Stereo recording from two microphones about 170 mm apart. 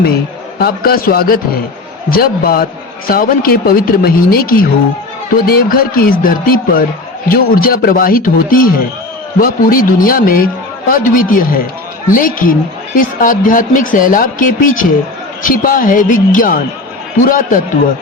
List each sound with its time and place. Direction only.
0.6 s a man's voice: 60° left (ahead or behind)